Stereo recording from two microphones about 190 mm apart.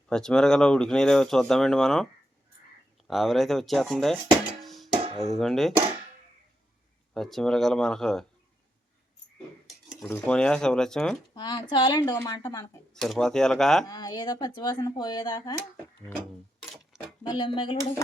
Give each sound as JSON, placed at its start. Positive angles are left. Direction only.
{"t": 0.1, "sound": "speech", "side_deg": 5}
{"t": 3.1, "sound": "speech", "side_deg": 0}
{"t": 4.6, "sound": "music", "side_deg": 0}
{"t": 5.3, "sound": "speech", "side_deg": 0}
{"t": 7.1, "sound": "speech", "side_deg": 0}
{"t": 9.6, "sound": "dishes", "side_deg": 0}
{"t": 10.2, "sound": "speech", "side_deg": 5}
{"t": 11.3, "sound": "speech", "side_deg": 20}
{"t": 12.9, "sound": "speech", "side_deg": 0}
{"t": 13.8, "sound": "speech", "side_deg": 20}
{"t": 16.6, "sound": "sewing machine", "side_deg": 0}
{"t": 17.2, "sound": "speech", "side_deg": 25}